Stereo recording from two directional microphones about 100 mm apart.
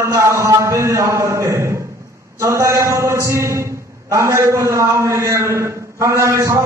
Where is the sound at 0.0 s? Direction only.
30° right (ahead or behind).